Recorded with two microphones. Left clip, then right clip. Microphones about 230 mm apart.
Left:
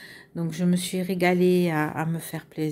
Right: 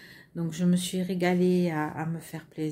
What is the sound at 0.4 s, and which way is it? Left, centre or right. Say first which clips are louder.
Speech: left 2 dB; left.